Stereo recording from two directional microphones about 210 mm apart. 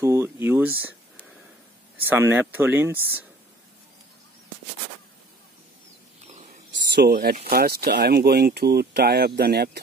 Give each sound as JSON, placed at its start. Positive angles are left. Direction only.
{"t": 0.0, "sound": "speech", "side_deg": -15}
{"t": 2.0, "sound": "speech", "side_deg": -10}
{"t": 6.2, "sound": "a sound", "side_deg": -35}
{"t": 6.7, "sound": "speech", "side_deg": -55}